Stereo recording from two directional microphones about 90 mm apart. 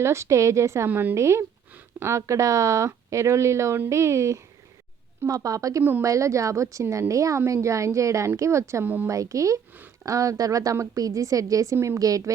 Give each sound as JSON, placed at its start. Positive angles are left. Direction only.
{"t": 0.0, "sound": "speech", "side_deg": -30}
{"t": 0.9, "sound": "a woman's voice", "side_deg": -20}
{"t": 1.1, "sound": "speech", "side_deg": -30}
{"t": 9.7, "sound": "a sound", "side_deg": -20}
{"t": 10.1, "sound": "speech", "side_deg": -40}